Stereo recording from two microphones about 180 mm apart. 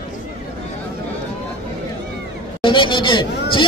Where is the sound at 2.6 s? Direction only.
25° left (ahead or behind).